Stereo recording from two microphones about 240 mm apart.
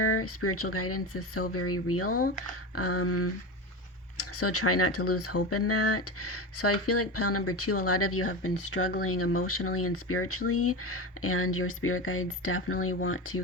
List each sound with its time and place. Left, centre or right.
0.0 s speech: left